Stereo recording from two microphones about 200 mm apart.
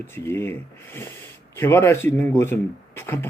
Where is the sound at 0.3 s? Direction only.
10° left (ahead or behind).